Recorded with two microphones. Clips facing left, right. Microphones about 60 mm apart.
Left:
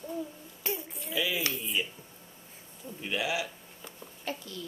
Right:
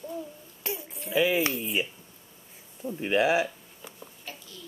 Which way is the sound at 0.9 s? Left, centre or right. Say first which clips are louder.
Right 10 dB; right.